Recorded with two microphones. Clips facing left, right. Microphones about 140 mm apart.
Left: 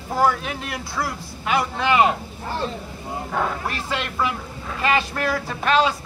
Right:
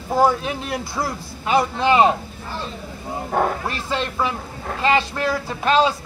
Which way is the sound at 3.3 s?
40° right (ahead or behind).